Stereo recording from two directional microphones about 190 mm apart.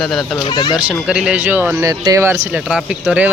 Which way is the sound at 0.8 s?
5° right (ahead or behind).